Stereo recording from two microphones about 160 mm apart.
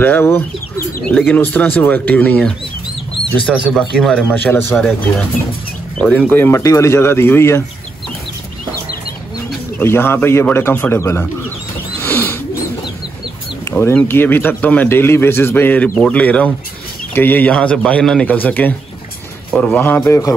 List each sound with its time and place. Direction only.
0.0 s a man's voice: 15° left (ahead or behind)
5.9 s a man's voice: 5° left (ahead or behind)
9.8 s a man's voice: 15° left (ahead or behind)
12.0 s bird: 10° left (ahead or behind)
13.7 s a sound: 15° left (ahead or behind)
13.9 s a man's voice: 15° left (ahead or behind)